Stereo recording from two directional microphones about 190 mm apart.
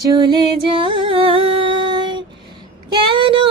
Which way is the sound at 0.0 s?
20° right (ahead or behind).